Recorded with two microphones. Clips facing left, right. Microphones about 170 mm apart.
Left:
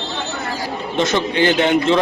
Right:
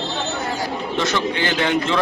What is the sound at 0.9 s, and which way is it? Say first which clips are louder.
A man's voice: left 5 dB; 20° left (ahead or behind).